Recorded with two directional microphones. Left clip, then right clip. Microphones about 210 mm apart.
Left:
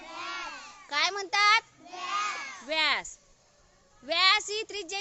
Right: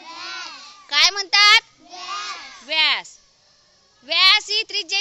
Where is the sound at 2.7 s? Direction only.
5° left (ahead or behind).